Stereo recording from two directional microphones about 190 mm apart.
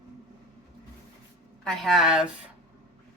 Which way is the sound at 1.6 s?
Centre (ahead or behind).